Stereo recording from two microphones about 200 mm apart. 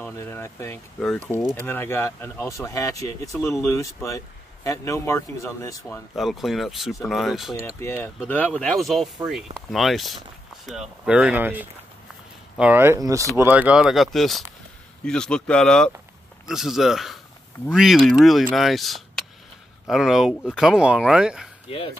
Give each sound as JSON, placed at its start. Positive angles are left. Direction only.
{"t": 0.0, "sound": "speech", "side_deg": 15}
{"t": 6.1, "sound": "speech", "side_deg": 0}
{"t": 7.6, "sound": "speech", "side_deg": 15}
{"t": 21.6, "sound": "speech", "side_deg": 30}